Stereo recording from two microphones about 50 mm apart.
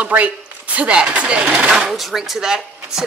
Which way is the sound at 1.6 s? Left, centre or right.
Centre.